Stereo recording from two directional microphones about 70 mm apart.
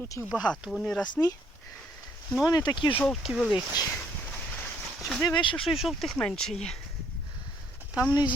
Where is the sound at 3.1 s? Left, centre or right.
Centre.